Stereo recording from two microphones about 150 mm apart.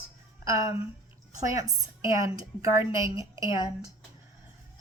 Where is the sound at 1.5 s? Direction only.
20° right (ahead or behind).